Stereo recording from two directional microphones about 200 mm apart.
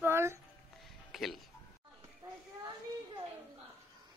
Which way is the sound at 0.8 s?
Centre (ahead or behind).